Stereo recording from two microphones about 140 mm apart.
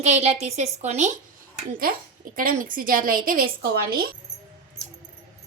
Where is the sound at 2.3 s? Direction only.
90° right.